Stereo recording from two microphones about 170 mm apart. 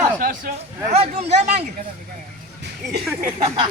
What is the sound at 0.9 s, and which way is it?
Speech, 40° right (ahead or behind).